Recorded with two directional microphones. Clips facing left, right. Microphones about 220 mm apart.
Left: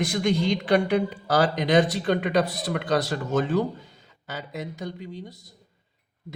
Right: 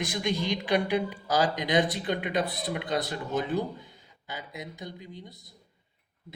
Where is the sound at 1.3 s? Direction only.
70° left (ahead or behind).